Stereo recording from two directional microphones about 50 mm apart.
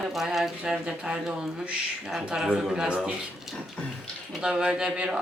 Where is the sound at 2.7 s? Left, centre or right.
Centre.